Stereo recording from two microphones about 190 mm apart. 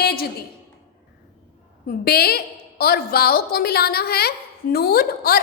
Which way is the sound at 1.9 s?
55° left (ahead or behind).